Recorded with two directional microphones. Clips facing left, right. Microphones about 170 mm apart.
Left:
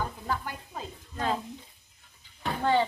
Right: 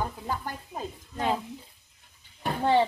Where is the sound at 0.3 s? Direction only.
15° right (ahead or behind).